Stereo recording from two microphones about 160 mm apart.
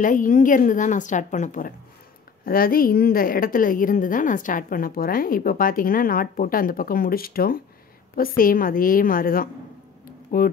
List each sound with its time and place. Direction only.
0.0 s a woman's voice: 55° left (ahead or behind)
2.4 s a woman's voice: 65° left (ahead or behind)
10.0 s a sound: 65° left (ahead or behind)